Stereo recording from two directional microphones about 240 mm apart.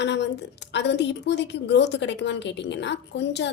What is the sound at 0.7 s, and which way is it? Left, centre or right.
A woman's voice, left.